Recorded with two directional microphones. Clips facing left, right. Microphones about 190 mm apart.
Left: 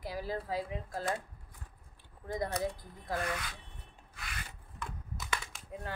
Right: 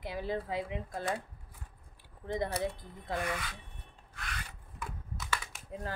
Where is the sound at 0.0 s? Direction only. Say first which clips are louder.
Right 2 dB; 20° right (ahead or behind).